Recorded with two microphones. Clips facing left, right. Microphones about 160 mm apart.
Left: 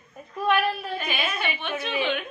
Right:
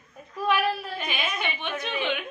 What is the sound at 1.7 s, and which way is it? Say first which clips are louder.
Speech: left 4 dB; 10° left (ahead or behind).